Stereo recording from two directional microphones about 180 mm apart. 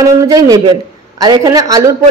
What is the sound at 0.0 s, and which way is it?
A woman's voice, 20° right (ahead or behind).